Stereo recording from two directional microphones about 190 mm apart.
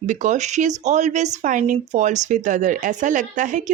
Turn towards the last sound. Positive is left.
turn(degrees=-40)  # may be behind; listen again after turning